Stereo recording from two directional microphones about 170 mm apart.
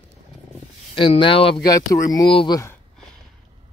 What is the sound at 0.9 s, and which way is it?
Speech, 30° left (ahead or behind).